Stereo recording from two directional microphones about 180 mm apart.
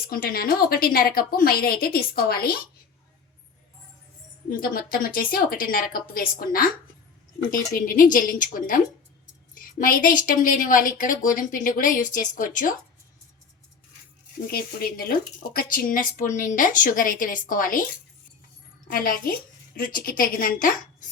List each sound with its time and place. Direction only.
0.1 s a woman's voice: 55° left (ahead or behind)
4.4 s speech: 50° left (ahead or behind)
14.5 s speech: 55° left (ahead or behind)
18.9 s speech: 50° left (ahead or behind)